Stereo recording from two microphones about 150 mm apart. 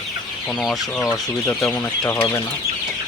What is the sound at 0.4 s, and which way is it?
Speech, centre (ahead or behind).